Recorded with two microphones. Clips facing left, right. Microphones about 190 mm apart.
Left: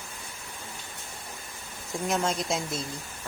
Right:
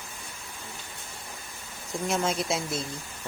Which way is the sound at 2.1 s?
Centre (ahead or behind).